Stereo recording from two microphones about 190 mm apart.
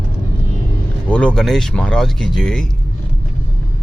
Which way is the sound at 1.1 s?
5° left (ahead or behind).